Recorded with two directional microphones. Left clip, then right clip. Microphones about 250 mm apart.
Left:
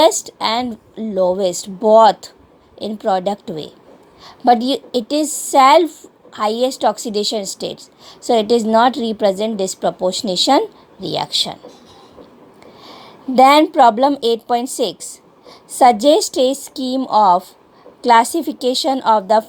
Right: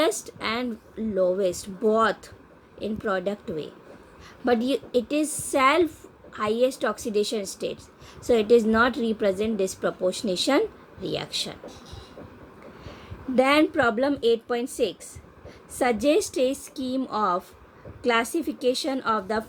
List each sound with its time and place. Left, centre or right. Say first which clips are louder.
0.0 s a woman's voice: left 12 dB; left
4.6 s a woman's voice: left 5 dB; centre
5.2 s a woman's voice: left 13 dB; left
12.8 s a woman's voice: left 9 dB; left